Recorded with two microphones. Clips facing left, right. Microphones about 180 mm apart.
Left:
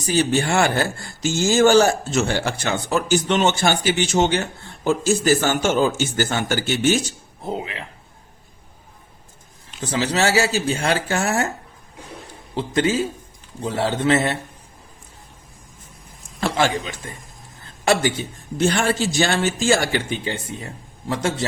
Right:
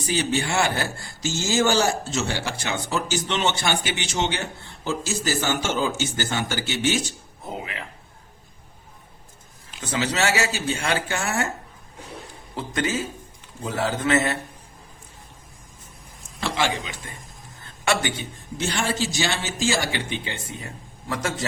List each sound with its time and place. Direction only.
0.1 s speech: 50° left (ahead or behind)
7.6 s speech: 25° left (ahead or behind)
9.8 s speech: 35° left (ahead or behind)
12.5 s speech: 30° left (ahead or behind)
16.4 s speech: 50° left (ahead or behind)
17.6 s a woman's voice: 35° left (ahead or behind)
18.7 s speech: 55° left (ahead or behind); by 21.4 s 30° left (ahead or behind)